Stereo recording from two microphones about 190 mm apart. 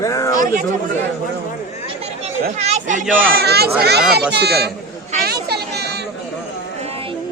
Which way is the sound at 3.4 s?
55° right (ahead or behind).